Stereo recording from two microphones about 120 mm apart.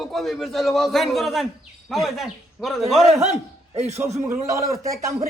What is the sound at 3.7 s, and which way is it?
Speech, 65° right (ahead or behind).